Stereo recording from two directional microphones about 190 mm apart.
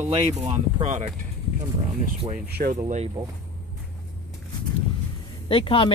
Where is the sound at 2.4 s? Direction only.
55° right (ahead or behind).